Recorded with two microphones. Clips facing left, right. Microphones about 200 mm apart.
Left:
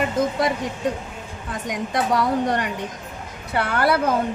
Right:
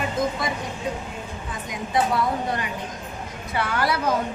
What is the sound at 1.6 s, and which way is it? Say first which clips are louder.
A woman's voice: even; 75° left (ahead or behind).